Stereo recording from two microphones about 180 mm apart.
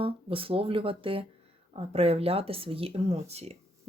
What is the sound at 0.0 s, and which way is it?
Speech, 30° right (ahead or behind).